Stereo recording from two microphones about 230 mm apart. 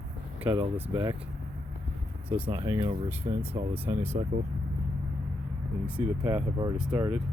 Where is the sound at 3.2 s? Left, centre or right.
Right.